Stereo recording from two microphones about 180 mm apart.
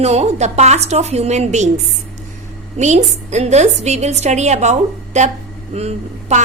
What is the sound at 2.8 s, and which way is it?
A woman's voice, 40° right (ahead or behind).